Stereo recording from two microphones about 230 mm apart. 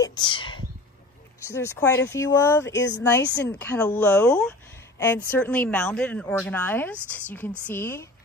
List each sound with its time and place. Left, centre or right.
0.0 s whispering: centre
1.5 s speech: centre